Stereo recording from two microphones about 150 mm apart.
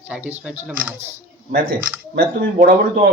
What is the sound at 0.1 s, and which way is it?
Speech, 5° right (ahead or behind).